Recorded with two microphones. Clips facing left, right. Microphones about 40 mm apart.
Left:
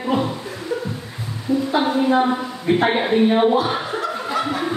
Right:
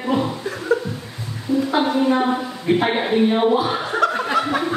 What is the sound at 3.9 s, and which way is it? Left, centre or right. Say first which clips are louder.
Laughter: right 5 dB; right.